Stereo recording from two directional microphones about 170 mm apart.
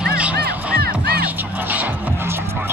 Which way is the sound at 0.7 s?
65° right (ahead or behind).